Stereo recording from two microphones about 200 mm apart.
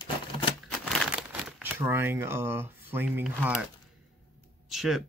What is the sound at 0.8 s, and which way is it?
Crumpling, centre (ahead or behind).